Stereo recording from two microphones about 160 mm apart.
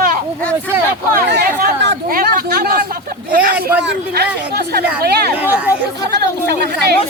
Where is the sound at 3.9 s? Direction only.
85° right.